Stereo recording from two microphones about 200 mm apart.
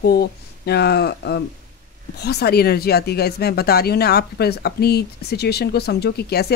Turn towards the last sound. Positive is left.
turn(degrees=55)  # may be behind; listen again after turning